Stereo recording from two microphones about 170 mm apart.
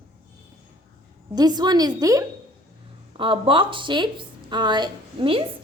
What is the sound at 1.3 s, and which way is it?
Speech, 25° right (ahead or behind).